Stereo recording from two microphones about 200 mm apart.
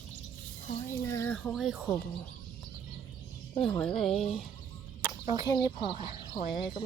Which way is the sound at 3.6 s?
5° left (ahead or behind).